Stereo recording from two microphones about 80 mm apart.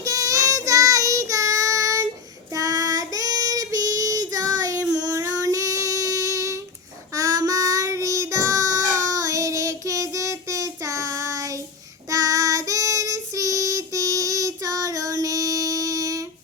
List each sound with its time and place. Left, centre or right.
0.0 s child singing: right